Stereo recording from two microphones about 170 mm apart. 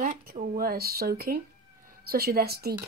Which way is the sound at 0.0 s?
55° right (ahead or behind).